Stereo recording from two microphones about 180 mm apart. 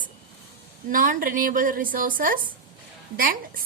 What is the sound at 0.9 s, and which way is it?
A woman's voice, 50° right (ahead or behind).